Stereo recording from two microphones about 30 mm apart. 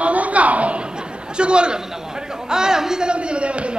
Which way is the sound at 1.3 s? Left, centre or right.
Right.